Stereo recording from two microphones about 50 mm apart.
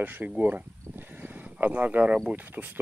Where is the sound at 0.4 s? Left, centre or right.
Right.